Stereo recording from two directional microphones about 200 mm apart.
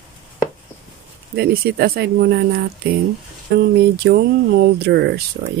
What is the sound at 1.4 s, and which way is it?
Speech, 50° right (ahead or behind).